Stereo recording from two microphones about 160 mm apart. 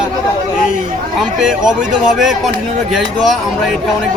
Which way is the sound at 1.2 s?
5° right (ahead or behind).